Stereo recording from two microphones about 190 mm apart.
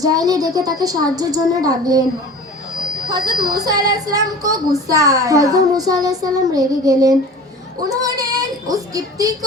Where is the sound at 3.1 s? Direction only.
20° right (ahead or behind).